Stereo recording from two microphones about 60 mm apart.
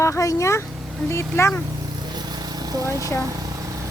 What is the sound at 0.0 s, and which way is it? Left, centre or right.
Speech, left.